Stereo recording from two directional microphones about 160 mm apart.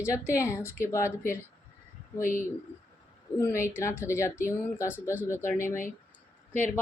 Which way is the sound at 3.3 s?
15° left (ahead or behind).